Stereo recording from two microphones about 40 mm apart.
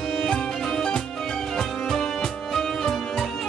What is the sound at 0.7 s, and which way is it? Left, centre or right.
Music, centre.